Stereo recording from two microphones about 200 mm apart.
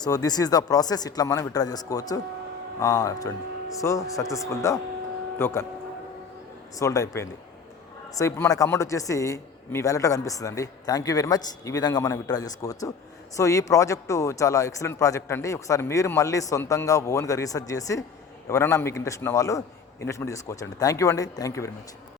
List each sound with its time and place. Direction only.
0.0 s a man's voice: 20° left (ahead or behind)
6.7 s a man's voice: 15° left (ahead or behind)